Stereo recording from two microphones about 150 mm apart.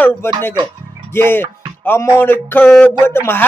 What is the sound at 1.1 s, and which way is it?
Music, 15° left (ahead or behind).